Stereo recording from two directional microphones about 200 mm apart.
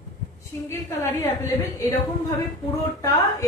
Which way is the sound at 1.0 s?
15° left (ahead or behind).